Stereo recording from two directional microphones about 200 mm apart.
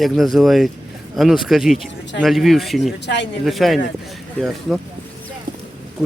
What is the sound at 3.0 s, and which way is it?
Speech, 60° left (ahead or behind).